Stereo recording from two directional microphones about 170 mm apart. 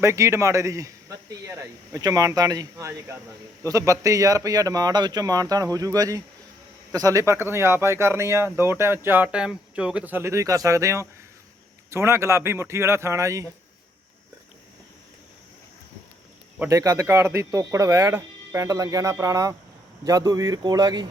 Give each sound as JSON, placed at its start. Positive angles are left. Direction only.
{"t": 0.0, "sound": "speech", "side_deg": -15}
{"t": 16.6, "sound": "speech", "side_deg": -20}